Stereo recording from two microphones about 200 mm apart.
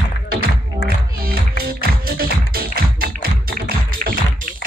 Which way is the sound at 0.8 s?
50° right (ahead or behind).